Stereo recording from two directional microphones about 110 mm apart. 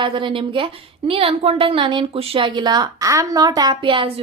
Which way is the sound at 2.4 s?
45° right (ahead or behind).